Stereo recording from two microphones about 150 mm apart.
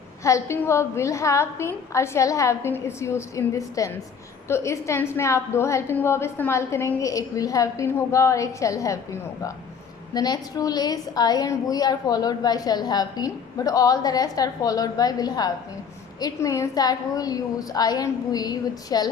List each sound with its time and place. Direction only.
0.3 s a woman's voice: 20° left (ahead or behind)